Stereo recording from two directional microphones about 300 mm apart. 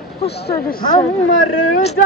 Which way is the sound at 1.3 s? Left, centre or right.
Left.